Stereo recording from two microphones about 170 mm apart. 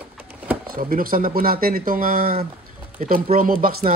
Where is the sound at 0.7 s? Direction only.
55° right (ahead or behind).